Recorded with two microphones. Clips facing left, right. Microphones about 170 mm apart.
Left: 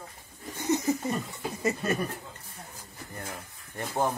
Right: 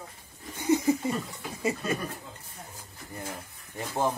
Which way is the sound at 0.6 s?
15° right (ahead or behind).